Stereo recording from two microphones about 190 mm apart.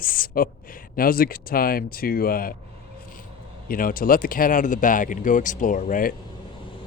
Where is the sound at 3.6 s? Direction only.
50° left (ahead or behind).